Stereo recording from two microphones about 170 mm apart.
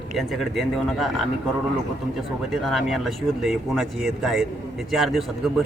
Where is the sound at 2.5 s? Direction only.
Centre (ahead or behind).